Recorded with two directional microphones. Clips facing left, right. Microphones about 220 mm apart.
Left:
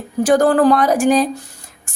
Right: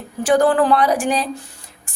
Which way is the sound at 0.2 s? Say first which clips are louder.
Left 2 dB; 40° left (ahead or behind).